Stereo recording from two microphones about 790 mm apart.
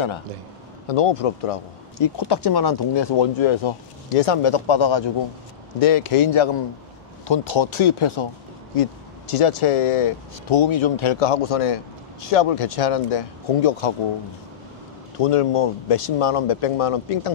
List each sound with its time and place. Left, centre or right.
0.8 s speech: left
9.3 s speech: left
15.1 s speech: left